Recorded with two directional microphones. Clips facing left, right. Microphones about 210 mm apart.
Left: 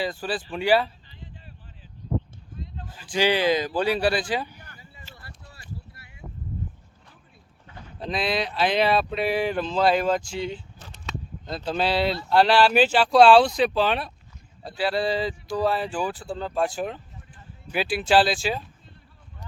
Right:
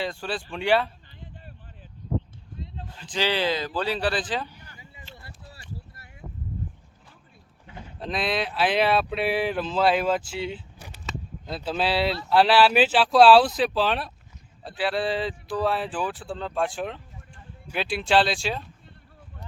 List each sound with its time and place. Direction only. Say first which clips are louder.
0.0 s speech: left 2 dB; 5° left (ahead or behind)
2.9 s speech: left 4 dB; 10° left (ahead or behind)
5.1 s a sound: right 1 dB; 25° right (ahead or behind)
7.9 s speech: left 1 dB; centre (ahead or behind)